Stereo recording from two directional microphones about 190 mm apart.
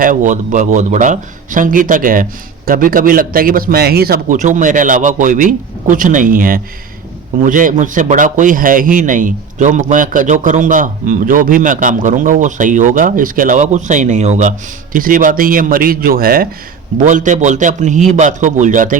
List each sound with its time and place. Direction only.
0.0 s a man's voice: 45° right (ahead or behind)